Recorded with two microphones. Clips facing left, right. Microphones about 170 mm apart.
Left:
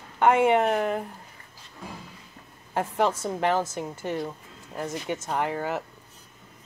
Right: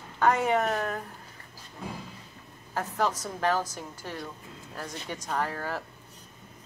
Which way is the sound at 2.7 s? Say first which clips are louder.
Left 4 dB; 30° left (ahead or behind).